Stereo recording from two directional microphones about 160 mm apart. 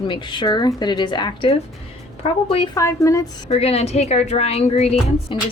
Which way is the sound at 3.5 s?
40° left (ahead or behind).